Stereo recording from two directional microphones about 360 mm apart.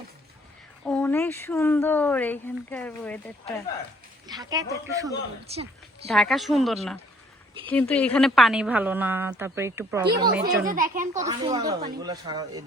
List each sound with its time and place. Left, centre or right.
0.9 s a woman's voice: centre
4.3 s speech: centre
6.1 s a woman's voice: centre
10.7 s a child's voice: right
11.2 s speech: centre